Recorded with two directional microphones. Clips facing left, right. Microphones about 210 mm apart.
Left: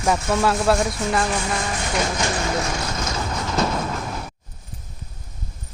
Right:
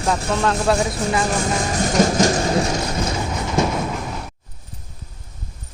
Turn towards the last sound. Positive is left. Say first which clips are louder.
# right 1 dB
turn(degrees=0)  # may be behind; listen again after turning